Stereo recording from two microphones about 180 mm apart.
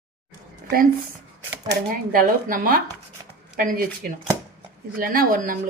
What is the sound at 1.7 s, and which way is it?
Speech, 50° right (ahead or behind).